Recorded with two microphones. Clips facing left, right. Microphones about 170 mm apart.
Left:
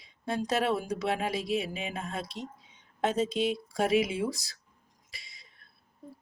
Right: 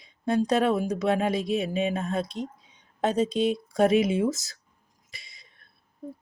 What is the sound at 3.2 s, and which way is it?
Speech, 20° right (ahead or behind).